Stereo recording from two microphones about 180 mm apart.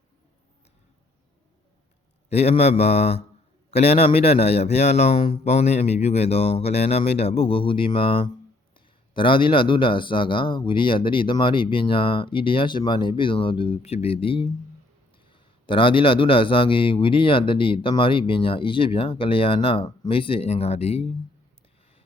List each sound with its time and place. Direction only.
2.3 s a man's voice: 35° left (ahead or behind)